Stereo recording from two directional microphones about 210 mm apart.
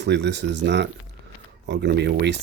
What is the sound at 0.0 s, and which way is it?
Speech, 55° right (ahead or behind).